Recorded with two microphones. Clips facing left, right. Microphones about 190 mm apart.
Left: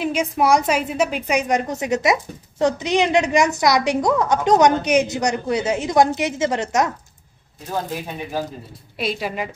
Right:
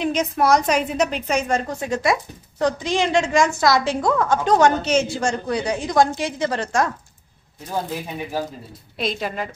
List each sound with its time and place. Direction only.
0.0 s a woman's voice: 10° left (ahead or behind)
8.9 s a woman's voice: 10° left (ahead or behind)